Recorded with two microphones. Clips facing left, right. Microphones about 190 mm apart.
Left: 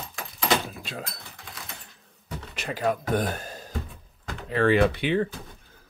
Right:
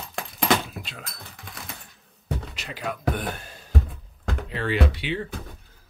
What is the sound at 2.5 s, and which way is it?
Speech, 50° left (ahead or behind).